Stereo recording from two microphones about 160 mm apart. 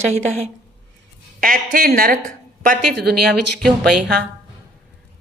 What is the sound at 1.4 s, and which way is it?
Speech, 60° right (ahead or behind).